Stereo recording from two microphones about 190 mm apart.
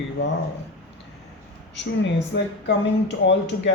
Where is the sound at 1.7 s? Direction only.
70° left (ahead or behind).